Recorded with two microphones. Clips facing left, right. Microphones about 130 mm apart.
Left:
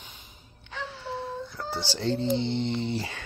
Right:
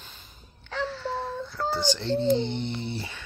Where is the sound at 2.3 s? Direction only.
90° left.